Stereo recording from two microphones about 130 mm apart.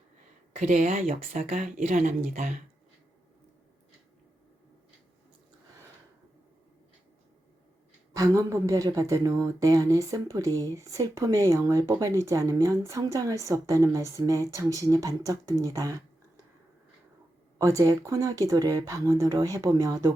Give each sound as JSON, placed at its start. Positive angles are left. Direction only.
{"t": 0.5, "sound": "speech", "side_deg": -65}
{"t": 8.1, "sound": "speech", "side_deg": -25}
{"t": 17.6, "sound": "speech", "side_deg": -25}